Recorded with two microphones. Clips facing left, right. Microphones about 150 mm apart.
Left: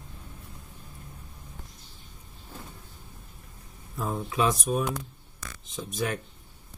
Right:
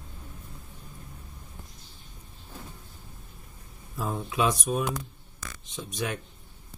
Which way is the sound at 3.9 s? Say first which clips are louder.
Left 1 dB; centre (ahead or behind).